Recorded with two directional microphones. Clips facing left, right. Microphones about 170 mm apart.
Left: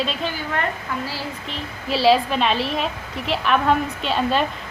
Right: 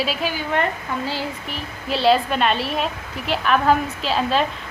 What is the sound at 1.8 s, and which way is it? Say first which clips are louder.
A woman's voice: left 1 dB; centre (ahead or behind).